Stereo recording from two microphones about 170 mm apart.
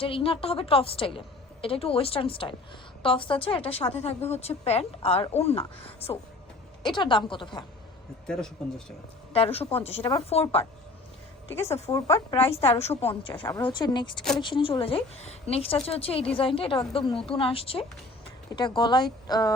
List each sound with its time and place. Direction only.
0.0 s a woman's voice: 30° left (ahead or behind)
8.6 s speech: centre (ahead or behind)
9.3 s a woman's voice: 35° left (ahead or behind)
11.5 s a woman's voice: 15° left (ahead or behind)
12.5 s a woman's voice: 35° left (ahead or behind)